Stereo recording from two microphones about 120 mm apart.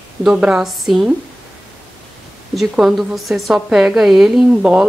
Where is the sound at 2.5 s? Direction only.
Centre (ahead or behind).